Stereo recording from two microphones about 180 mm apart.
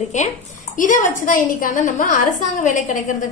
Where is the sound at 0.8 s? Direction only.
45° left (ahead or behind).